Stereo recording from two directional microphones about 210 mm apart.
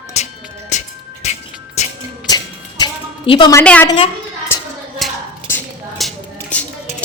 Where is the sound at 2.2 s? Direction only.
20° left (ahead or behind).